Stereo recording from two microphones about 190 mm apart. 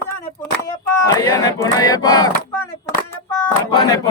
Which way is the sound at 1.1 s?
20° left (ahead or behind).